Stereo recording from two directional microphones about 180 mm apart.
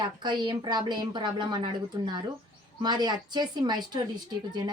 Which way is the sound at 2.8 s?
25° right (ahead or behind).